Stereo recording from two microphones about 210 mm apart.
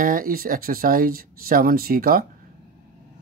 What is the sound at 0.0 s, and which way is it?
Speech, 40° right (ahead or behind).